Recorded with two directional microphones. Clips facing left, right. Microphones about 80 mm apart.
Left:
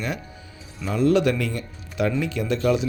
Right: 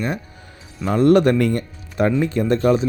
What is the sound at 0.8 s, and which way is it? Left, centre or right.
Speech, right.